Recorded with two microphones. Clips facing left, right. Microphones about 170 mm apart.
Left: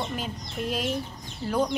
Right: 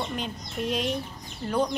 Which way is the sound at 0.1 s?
5° left (ahead or behind).